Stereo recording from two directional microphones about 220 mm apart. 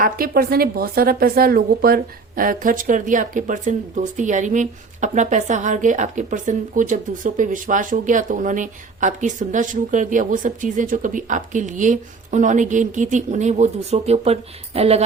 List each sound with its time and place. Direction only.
0.0 s a woman's voice: 40° right (ahead or behind)